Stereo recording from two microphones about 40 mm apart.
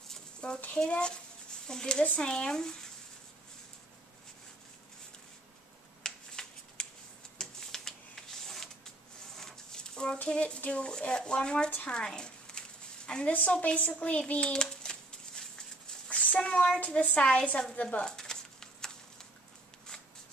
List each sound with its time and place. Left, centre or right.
0.4 s speech: left
6.0 s shuffling cards: centre
7.3 s printer: centre
9.4 s a sound: centre
10.2 s speech: left
11.9 s a sound: centre
16.1 s a child's voice: left
16.8 s speech: left
18.0 s a sound: centre